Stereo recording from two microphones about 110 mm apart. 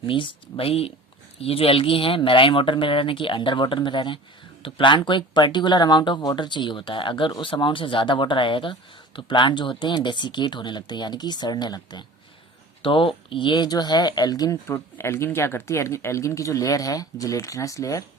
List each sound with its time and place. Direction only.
0.0 s speech: 50° left (ahead or behind)
12.8 s speech: 50° left (ahead or behind); by 14.6 s 35° left (ahead or behind)
14.7 s speech: 25° left (ahead or behind)